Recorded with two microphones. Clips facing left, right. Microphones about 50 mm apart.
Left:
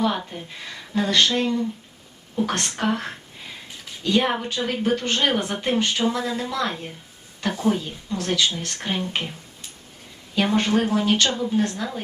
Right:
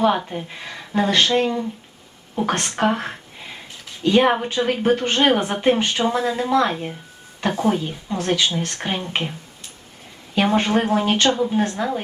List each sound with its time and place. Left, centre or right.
0.6 s a woman's voice: right
10.3 s a woman's voice: right